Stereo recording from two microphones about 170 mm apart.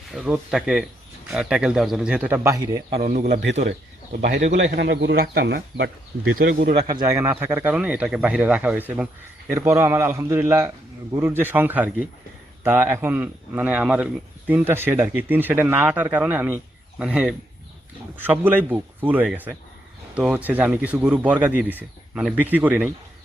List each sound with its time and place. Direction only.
0.1 s a man's voice: 5° right (ahead or behind); by 2.8 s 20° right (ahead or behind)
3.0 s speech: 50° right (ahead or behind)
4.7 s speech: 90° right
6.8 s a man's voice: 20° right (ahead or behind)